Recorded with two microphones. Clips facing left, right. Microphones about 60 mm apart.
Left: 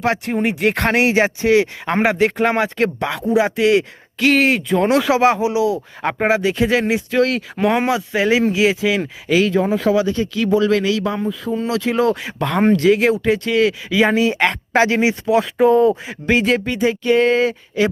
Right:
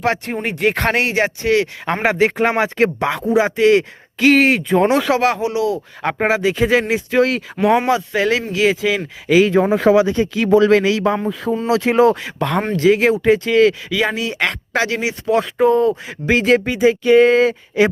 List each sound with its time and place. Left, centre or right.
0.0 s speech: centre
1.0 s speech: left
1.8 s speech: centre
3.2 s speech: centre
5.2 s speech: centre
9.5 s speech: right
12.2 s speech: centre
13.9 s speech: left
15.3 s speech: centre